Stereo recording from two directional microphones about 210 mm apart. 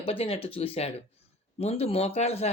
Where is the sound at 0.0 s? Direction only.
25° left (ahead or behind).